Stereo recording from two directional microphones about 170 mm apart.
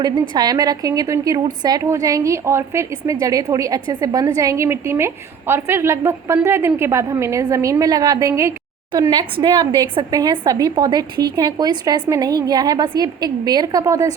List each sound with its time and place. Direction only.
0.0 s a woman's voice: 25° right (ahead or behind)